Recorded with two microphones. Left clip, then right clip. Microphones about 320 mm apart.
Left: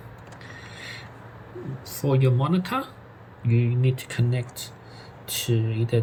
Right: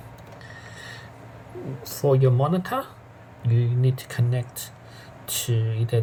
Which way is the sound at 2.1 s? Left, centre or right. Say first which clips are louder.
Right 3 dB; right.